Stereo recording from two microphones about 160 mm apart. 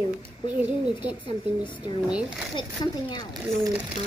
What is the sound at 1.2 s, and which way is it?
Speech, 30° left (ahead or behind).